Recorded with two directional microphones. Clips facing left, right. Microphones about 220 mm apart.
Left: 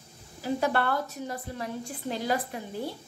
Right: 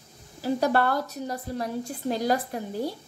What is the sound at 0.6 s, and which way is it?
A woman's voice, 40° right (ahead or behind).